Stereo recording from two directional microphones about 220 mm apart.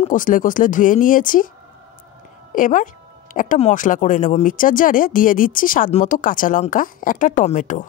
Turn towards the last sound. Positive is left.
turn(degrees=35)  # may be behind; listen again after turning